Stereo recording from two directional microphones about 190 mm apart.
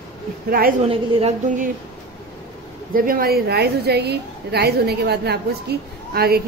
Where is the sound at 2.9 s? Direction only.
50° right (ahead or behind).